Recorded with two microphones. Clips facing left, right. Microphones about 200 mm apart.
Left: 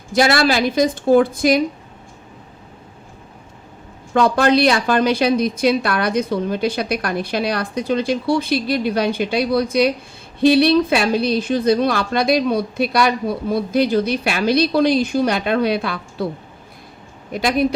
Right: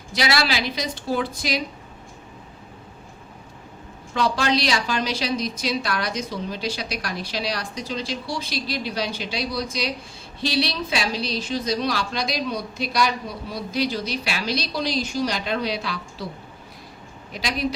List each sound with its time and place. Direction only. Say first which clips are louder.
0.1 s speech: left 8 dB; 50° left (ahead or behind)
4.1 s a woman's voice: left 7 dB; 55° left (ahead or behind)
17.3 s speech: left 8 dB; 55° left (ahead or behind)